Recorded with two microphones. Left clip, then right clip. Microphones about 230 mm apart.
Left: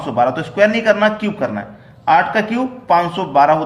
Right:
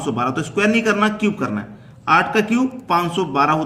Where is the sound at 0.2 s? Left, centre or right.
Right.